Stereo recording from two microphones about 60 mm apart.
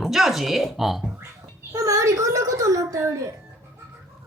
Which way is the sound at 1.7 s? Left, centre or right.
Right.